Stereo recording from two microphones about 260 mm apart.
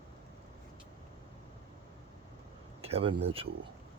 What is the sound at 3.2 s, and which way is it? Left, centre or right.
Speech, right.